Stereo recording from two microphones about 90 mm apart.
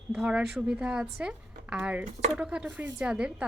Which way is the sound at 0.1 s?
10° right (ahead or behind).